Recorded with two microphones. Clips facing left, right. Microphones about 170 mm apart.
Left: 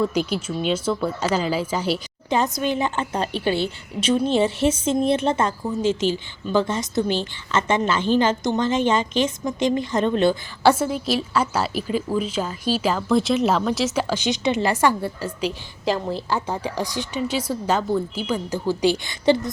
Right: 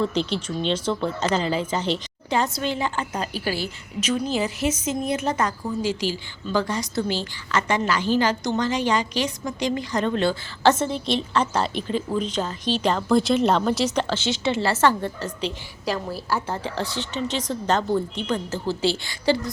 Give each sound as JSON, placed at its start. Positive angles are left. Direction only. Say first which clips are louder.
{"t": 0.0, "sound": "a woman's voice", "louder": "left 2 dB", "side_deg": 10}
{"t": 16.0, "sound": "a woman's voice", "louder": "left 2 dB", "side_deg": 20}